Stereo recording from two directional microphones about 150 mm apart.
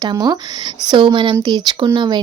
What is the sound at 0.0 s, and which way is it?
Speech, 25° right (ahead or behind).